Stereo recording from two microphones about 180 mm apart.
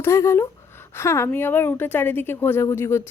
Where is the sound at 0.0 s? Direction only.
15° left (ahead or behind).